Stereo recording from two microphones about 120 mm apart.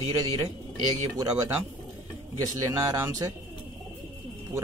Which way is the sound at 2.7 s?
25° right (ahead or behind).